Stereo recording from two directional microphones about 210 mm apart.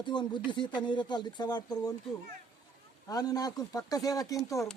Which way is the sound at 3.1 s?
20° left (ahead or behind).